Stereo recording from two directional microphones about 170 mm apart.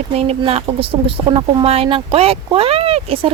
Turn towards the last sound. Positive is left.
turn(degrees=-35)  # may be behind; listen again after turning